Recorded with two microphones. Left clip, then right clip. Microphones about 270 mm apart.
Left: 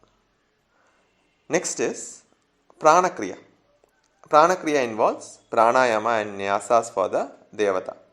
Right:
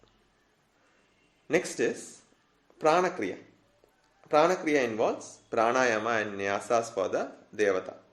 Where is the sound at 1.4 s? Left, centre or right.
Centre.